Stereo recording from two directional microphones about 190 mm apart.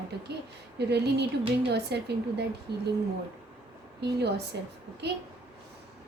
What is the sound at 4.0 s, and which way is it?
A woman's voice, 60° right (ahead or behind).